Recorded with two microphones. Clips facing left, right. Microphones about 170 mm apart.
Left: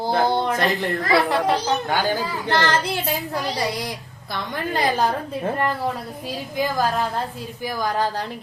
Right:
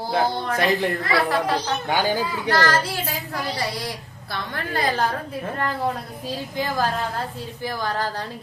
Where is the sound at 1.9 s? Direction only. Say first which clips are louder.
Right 4 dB; 15° right (ahead or behind).